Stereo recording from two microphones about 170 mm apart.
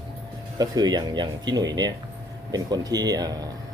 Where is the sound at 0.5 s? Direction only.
25° right (ahead or behind).